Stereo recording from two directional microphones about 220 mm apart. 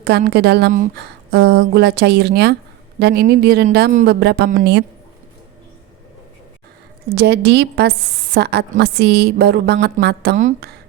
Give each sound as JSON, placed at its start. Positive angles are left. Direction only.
{"t": 0.0, "sound": "speech", "side_deg": -45}
{"t": 7.2, "sound": "speech", "side_deg": -50}